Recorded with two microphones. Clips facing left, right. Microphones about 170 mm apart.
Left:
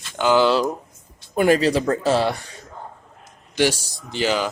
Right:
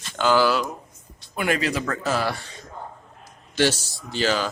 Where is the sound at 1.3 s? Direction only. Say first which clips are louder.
Left 7 dB; 35° left (ahead or behind).